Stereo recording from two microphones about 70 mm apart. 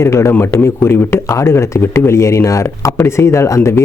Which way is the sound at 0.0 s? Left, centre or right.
Left.